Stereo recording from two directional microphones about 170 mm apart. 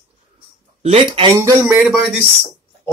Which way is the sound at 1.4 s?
15° right (ahead or behind).